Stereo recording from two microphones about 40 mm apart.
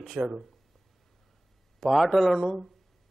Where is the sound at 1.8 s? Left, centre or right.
Centre.